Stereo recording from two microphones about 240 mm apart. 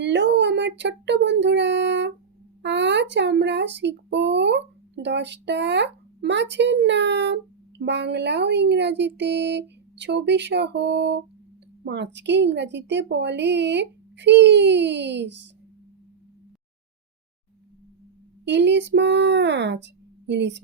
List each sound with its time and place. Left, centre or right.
0.0 s a sound: right
2.6 s speech: right
18.4 s speech: right